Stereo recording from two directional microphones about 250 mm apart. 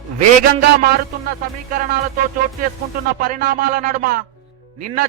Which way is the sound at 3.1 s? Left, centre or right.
Right.